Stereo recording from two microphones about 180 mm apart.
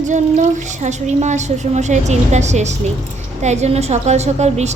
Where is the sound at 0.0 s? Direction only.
45° right (ahead or behind).